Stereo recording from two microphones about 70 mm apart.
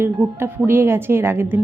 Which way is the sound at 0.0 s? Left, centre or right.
Right.